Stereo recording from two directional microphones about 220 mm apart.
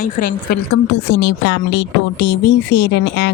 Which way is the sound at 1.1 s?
55° left (ahead or behind).